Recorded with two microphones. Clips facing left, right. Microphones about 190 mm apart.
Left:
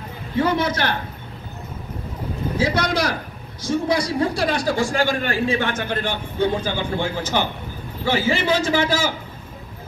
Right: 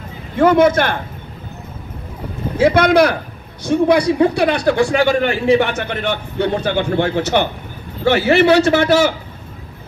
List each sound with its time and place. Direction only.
0.4 s a man's voice: 50° right (ahead or behind)
2.5 s a man's voice: 55° right (ahead or behind)